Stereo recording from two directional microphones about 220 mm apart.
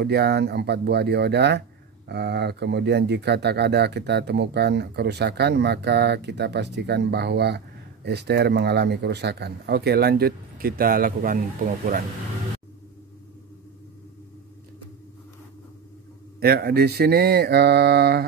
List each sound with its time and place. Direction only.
0.0 s speech: 45° right (ahead or behind)
16.3 s speech: 45° right (ahead or behind)